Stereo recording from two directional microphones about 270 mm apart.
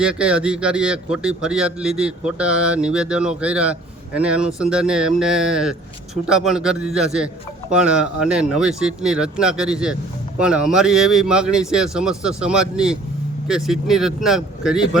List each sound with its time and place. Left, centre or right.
0.0 s speech: centre